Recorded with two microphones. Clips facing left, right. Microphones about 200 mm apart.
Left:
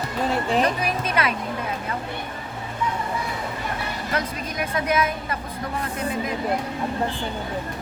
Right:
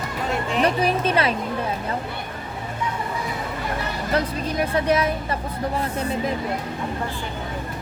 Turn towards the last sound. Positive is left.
turn(degrees=-30)  # may be behind; listen again after turning